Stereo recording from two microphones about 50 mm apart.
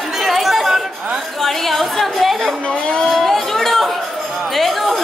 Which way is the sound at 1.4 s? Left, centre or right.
Centre.